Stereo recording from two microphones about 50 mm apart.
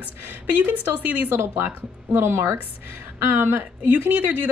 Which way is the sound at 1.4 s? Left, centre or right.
Right.